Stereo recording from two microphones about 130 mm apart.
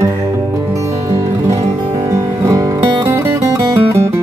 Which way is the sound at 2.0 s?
25° right (ahead or behind).